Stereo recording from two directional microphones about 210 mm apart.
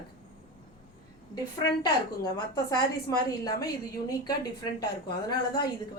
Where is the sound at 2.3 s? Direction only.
20° left (ahead or behind).